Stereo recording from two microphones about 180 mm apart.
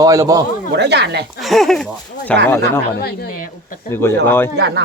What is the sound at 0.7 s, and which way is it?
Speech, 70° right (ahead or behind).